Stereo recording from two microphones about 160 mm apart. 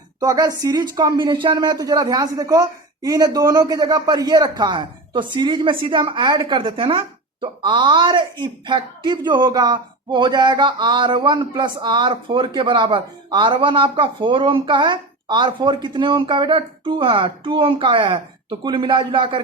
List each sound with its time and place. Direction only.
0.2 s speech: 25° right (ahead or behind)